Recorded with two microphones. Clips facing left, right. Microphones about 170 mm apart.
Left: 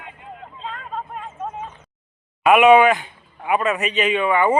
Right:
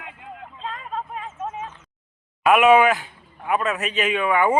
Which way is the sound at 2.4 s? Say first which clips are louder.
Left 3 dB; centre (ahead or behind).